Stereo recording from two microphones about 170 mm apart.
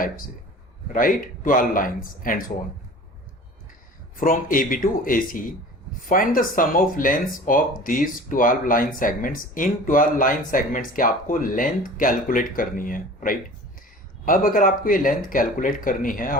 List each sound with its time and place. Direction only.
0.9 s speech: 55° left (ahead or behind)
4.2 s a man's voice: 55° left (ahead or behind)